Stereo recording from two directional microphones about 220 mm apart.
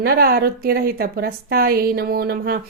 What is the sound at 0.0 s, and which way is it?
A woman's voice, 45° right (ahead or behind).